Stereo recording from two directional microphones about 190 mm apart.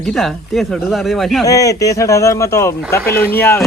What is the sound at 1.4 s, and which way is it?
Speech, 20° left (ahead or behind).